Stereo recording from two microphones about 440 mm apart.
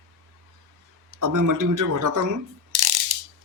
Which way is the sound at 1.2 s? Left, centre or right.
Right.